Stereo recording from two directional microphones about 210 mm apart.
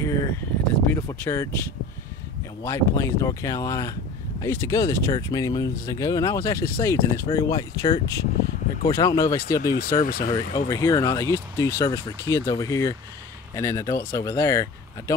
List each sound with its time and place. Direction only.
0.0 s a sound: 15° left (ahead or behind)
0.8 s speech: 10° left (ahead or behind)
2.6 s speech: 15° left (ahead or behind)
9.6 s speech: 45° left (ahead or behind)
10.3 s speech: 15° left (ahead or behind)